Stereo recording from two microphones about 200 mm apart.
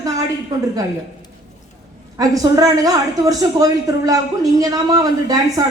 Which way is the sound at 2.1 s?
15° right (ahead or behind).